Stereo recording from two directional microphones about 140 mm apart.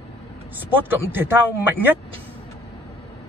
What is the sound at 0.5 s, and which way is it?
Speech, 15° right (ahead or behind).